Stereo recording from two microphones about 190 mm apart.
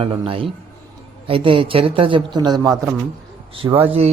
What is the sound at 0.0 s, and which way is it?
Speech, 30° right (ahead or behind).